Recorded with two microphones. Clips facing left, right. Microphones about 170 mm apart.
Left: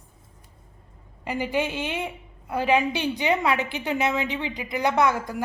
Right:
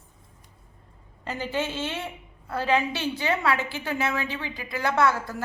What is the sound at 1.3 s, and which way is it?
A woman's voice, 15° left (ahead or behind).